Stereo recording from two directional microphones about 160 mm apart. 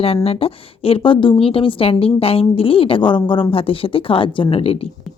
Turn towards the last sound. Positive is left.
turn(degrees=35)  # may be behind; listen again after turning